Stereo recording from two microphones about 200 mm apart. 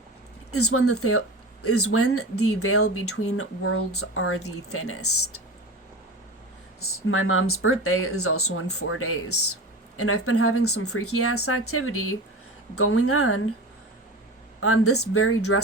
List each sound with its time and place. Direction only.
0.5 s speech: 90° left
6.7 s speech: 90° left
14.6 s speech: 90° left